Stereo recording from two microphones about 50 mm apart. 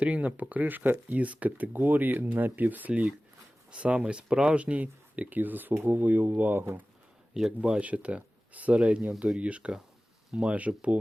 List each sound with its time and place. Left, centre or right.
0.0 s speech: right
7.6 s speech: right
8.8 s speech: centre